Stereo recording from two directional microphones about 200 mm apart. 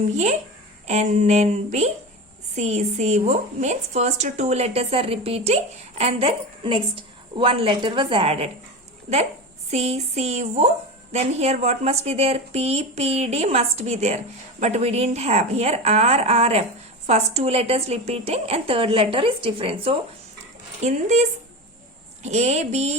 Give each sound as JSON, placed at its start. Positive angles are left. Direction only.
{"t": 0.9, "sound": "a woman's voice", "side_deg": -35}
{"t": 9.6, "sound": "a woman's voice", "side_deg": -30}